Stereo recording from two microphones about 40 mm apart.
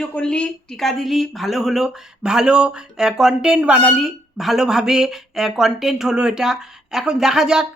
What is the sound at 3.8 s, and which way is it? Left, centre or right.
Speech, centre.